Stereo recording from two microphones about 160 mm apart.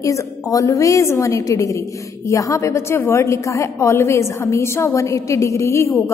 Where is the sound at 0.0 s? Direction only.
20° left (ahead or behind).